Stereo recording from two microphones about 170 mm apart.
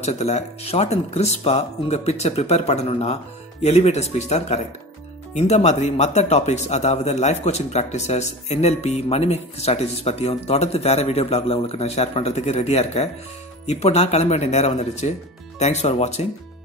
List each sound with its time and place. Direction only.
0.0 s speech: 40° left (ahead or behind)